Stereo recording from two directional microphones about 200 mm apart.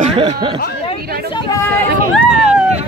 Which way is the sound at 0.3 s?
25° right (ahead or behind).